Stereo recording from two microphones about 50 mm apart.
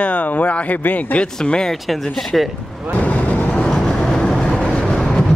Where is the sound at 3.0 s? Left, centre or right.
Left.